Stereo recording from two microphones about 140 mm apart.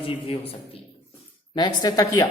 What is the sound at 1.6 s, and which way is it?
Speech, 30° left (ahead or behind).